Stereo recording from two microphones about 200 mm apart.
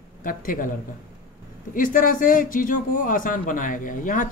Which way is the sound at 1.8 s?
40° left (ahead or behind).